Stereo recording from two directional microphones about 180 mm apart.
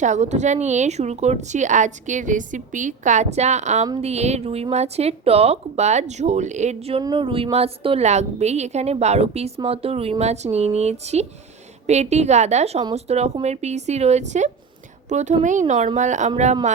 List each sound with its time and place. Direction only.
0.0 s a woman's voice: 40° right (ahead or behind)